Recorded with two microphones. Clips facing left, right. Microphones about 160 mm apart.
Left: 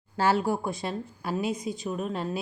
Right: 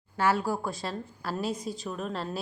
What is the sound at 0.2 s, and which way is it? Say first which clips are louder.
A woman's voice: left 2 dB; 25° left (ahead or behind).